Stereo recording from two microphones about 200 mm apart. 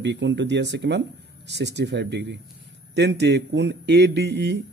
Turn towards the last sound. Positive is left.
turn(degrees=-60)  # may be behind; listen again after turning